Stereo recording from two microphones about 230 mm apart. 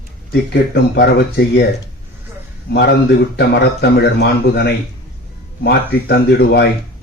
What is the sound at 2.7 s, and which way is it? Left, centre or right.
Speech, left.